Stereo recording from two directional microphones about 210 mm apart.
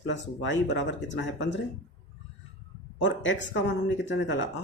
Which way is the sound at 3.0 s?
65° left (ahead or behind).